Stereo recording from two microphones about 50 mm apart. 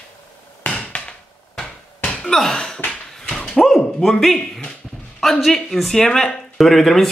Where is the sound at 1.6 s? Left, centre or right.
Centre.